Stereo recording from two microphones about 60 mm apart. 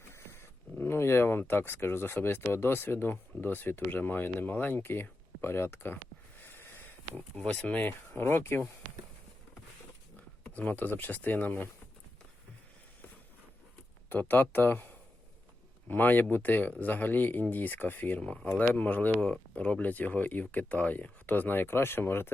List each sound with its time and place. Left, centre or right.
0.1 s speech: left
6.4 s a sound: left
7.3 s speech: left
10.6 s speech: left
14.1 s speech: left
18.2 s speech: centre
18.7 s speech: left